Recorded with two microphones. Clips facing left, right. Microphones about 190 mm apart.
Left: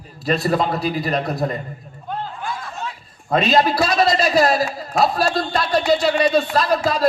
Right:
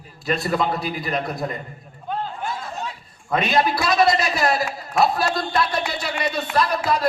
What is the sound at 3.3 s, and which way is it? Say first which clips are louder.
A man's voice: left 4 dB; 25° left (ahead or behind).